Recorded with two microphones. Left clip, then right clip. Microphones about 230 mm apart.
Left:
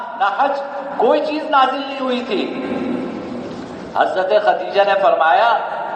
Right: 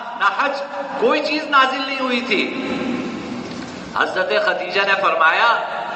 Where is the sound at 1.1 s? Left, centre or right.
Right.